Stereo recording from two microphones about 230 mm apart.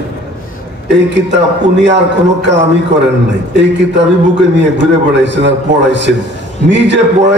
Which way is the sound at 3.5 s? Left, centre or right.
Right.